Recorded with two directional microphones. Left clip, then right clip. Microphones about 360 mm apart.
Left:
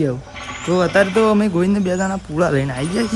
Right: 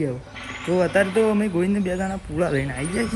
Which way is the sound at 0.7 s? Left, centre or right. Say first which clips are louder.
Left 4 dB; centre.